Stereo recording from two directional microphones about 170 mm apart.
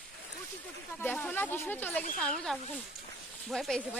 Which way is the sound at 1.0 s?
10° left (ahead or behind).